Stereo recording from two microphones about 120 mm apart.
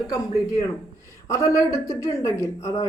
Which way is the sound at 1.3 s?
25° left (ahead or behind).